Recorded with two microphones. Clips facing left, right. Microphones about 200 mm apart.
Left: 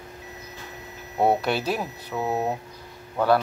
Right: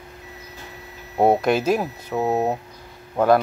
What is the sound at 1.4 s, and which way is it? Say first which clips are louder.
Speech: right 6 dB; 45° right (ahead or behind).